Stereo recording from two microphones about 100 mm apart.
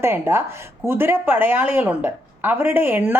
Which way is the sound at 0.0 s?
25° right (ahead or behind).